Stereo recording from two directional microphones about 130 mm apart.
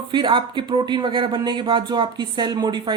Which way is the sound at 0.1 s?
35° right (ahead or behind).